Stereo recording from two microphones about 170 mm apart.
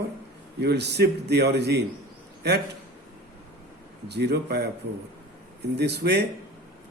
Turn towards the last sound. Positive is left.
turn(degrees=-75)  # may be behind; listen again after turning